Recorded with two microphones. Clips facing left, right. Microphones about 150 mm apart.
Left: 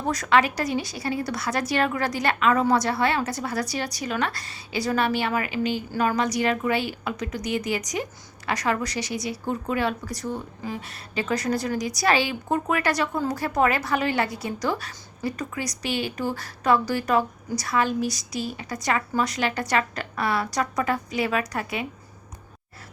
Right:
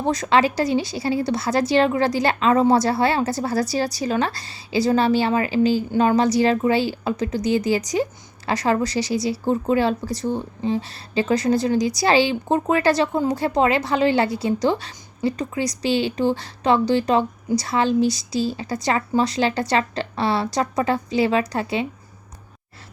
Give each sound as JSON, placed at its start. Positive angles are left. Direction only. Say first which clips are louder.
{"t": 0.0, "sound": "a woman's voice", "louder": "right 3 dB", "side_deg": -25}